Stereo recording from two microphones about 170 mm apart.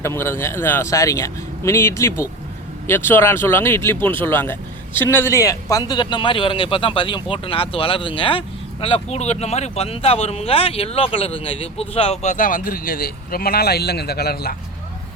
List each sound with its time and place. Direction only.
0.0 s a man's voice: 15° left (ahead or behind); by 14.5 s 65° left (ahead or behind)